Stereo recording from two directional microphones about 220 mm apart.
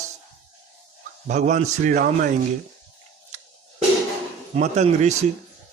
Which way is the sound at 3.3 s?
30° right (ahead or behind).